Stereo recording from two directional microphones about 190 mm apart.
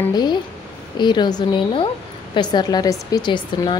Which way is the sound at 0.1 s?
20° left (ahead or behind).